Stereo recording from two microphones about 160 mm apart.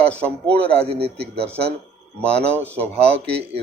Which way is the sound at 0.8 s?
35° right (ahead or behind).